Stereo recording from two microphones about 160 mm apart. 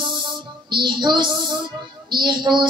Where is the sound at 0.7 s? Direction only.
30° right (ahead or behind).